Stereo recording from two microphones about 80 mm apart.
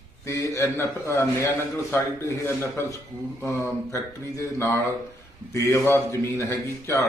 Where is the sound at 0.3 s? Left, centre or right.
Left.